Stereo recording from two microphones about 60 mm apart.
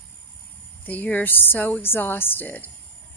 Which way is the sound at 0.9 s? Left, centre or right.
Left.